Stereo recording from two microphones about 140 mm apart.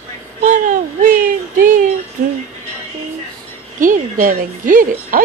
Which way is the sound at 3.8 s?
75° right (ahead or behind).